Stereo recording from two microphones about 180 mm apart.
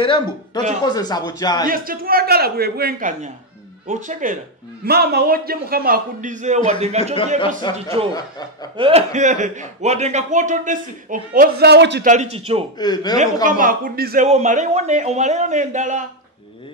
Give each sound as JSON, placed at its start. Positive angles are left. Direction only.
{"t": 0.8, "sound": "speech", "side_deg": 20}
{"t": 1.7, "sound": "a man's voice", "side_deg": -55}
{"t": 4.8, "sound": "a man's voice", "side_deg": -60}
{"t": 8.1, "sound": "speech", "side_deg": 20}
{"t": 8.7, "sound": "speech", "side_deg": -30}
{"t": 12.0, "sound": "a man's voice", "side_deg": -40}
{"t": 12.7, "sound": "speech", "side_deg": 20}
{"t": 13.2, "sound": "speech", "side_deg": -45}
{"t": 14.2, "sound": "a man's voice", "side_deg": -40}